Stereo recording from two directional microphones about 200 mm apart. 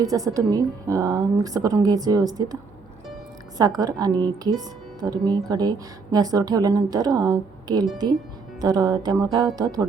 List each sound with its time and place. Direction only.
0.0 s a woman's voice: 15° right (ahead or behind)
3.6 s speech: 20° right (ahead or behind)